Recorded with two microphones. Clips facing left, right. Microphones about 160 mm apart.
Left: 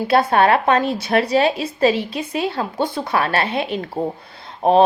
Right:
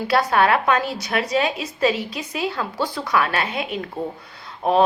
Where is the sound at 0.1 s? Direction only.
25° left (ahead or behind).